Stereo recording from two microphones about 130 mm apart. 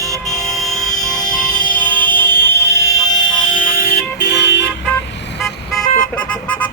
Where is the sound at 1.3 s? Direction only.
10° left (ahead or behind); by 3.6 s 30° left (ahead or behind).